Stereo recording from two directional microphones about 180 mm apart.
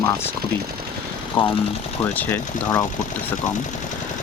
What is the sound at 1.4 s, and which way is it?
Speech, 25° left (ahead or behind).